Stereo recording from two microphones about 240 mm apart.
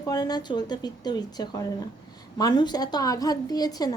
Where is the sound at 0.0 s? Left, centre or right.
Centre.